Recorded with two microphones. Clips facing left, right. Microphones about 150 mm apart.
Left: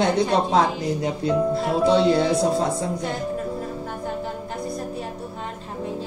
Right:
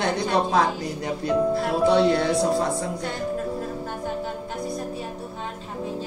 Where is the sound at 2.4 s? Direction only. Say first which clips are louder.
Left 1 dB; 20° left (ahead or behind).